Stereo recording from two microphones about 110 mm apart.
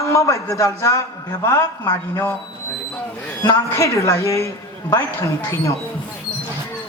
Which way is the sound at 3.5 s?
25° left (ahead or behind).